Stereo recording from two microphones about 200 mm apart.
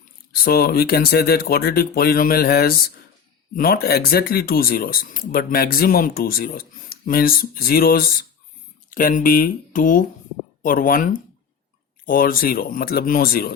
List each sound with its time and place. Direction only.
0.4 s speech: 50° left (ahead or behind)